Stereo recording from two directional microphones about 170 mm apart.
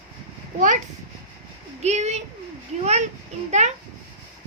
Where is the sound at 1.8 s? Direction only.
40° right (ahead or behind).